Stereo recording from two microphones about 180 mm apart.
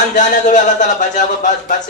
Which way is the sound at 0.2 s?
45° left (ahead or behind).